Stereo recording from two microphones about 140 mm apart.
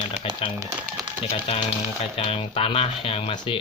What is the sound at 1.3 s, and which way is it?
Speech, 45° left (ahead or behind).